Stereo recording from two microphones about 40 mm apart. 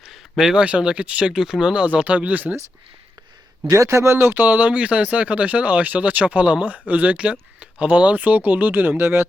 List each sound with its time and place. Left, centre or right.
0.3 s speech: centre
0.6 s speech: right
1.3 s speech: centre
2.0 s speech: right
3.6 s speech: right
4.4 s speech: right
4.7 s speech: right
9.0 s speech: right